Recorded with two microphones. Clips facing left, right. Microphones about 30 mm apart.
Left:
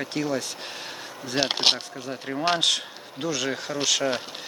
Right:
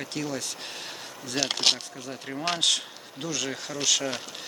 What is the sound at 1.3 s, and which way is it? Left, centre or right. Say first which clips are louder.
Speech: left 3 dB; left.